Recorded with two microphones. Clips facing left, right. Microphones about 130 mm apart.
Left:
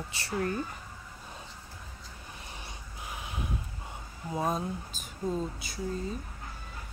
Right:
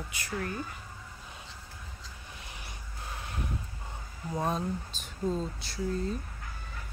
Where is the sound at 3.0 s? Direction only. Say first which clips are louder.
Left 1 dB; 15° left (ahead or behind).